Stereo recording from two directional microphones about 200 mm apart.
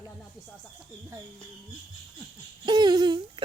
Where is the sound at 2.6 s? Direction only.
20° right (ahead or behind).